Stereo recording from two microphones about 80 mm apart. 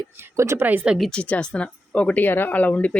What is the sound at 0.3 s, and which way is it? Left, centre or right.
Speech, right.